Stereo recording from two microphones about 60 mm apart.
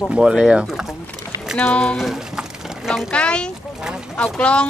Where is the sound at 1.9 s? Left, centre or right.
Centre.